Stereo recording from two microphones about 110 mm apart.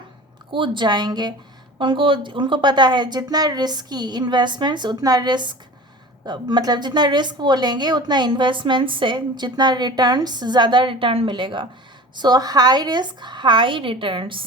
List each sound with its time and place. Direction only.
0.5 s a woman's voice: 50° right (ahead or behind)